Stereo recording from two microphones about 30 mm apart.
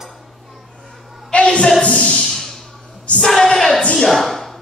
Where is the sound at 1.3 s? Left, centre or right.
Left.